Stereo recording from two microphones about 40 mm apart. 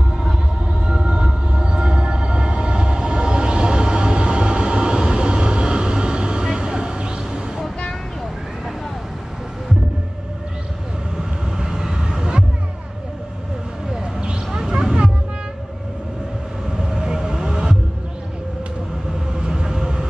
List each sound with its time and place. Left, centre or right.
0.7 s train: right
11.1 s vehicle: centre
13.8 s a sound: centre
14.2 s vehicle: right
16.8 s heart sounds: centre
19.3 s train: right